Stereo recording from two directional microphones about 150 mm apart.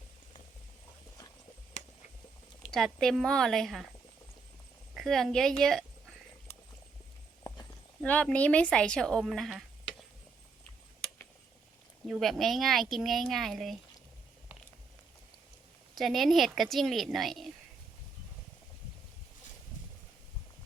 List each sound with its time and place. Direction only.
2.7 s speech: centre (ahead or behind)
4.9 s a sound: centre (ahead or behind)
7.4 s clip-clop: 25° left (ahead or behind)
8.0 s speech: 10° left (ahead or behind)
12.0 s speech: centre (ahead or behind)
16.0 s speech: centre (ahead or behind)